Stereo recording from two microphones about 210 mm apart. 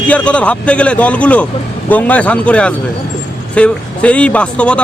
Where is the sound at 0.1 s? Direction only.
5° left (ahead or behind).